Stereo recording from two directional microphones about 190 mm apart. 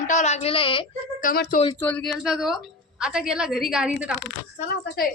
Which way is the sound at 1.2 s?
45° left (ahead or behind).